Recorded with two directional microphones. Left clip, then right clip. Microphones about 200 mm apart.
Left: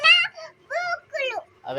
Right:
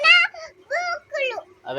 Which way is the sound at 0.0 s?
20° right (ahead or behind).